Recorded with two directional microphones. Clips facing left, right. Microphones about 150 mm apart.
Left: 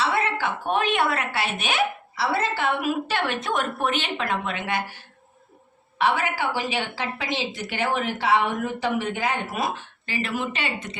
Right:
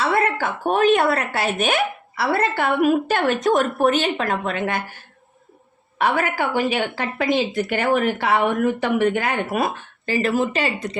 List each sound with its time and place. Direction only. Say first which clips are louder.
0.0 s speech: right 4 dB; 50° right (ahead or behind)
6.0 s speech: right 3 dB; 50° right (ahead or behind)